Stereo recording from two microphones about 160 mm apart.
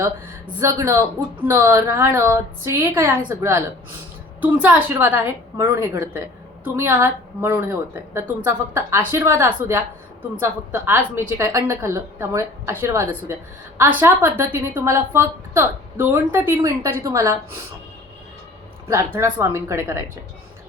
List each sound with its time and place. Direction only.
0.6 s a woman's voice: 15° right (ahead or behind)
18.9 s a woman's voice: 15° right (ahead or behind)